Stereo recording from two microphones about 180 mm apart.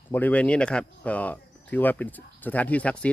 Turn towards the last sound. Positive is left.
turn(degrees=5)  # may be behind; listen again after turning